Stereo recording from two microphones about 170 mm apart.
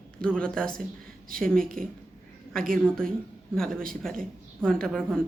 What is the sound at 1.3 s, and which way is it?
Speech, 55° right (ahead or behind).